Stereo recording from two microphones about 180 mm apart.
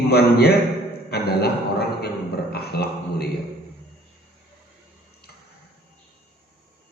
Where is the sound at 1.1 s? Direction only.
60° left (ahead or behind).